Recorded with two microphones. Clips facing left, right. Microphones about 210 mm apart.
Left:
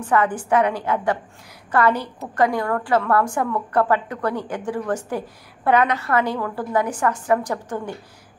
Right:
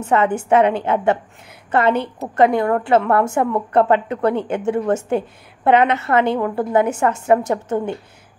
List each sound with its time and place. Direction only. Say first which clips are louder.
0.0 s a woman's voice: right 3 dB; 25° right (ahead or behind)